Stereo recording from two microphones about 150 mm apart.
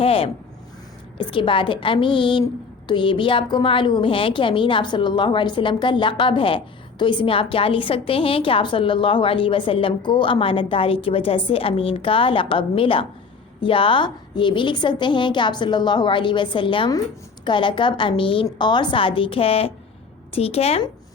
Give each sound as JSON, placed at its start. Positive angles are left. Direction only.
{"t": 0.0, "sound": "a woman's voice", "side_deg": 40}